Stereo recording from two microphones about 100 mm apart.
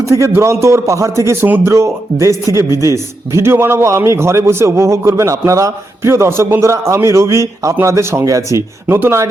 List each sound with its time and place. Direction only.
0.0 s a man's voice: 30° right (ahead or behind)